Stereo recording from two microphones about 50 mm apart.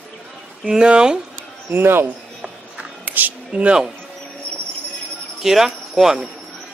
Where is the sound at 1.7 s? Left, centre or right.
Right.